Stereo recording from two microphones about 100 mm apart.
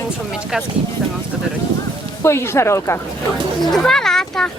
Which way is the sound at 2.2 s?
25° left (ahead or behind).